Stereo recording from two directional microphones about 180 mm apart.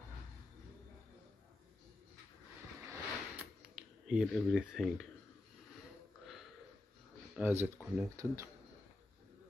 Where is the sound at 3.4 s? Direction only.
5° right (ahead or behind).